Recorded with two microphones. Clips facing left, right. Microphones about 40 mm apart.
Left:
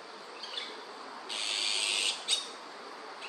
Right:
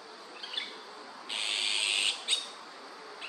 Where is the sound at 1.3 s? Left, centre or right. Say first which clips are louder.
Right 2 dB; right.